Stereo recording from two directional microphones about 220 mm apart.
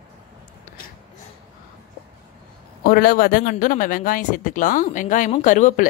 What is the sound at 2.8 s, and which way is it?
Speech, 40° left (ahead or behind).